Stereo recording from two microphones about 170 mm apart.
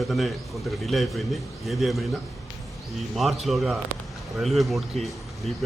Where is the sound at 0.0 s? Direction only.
Centre (ahead or behind).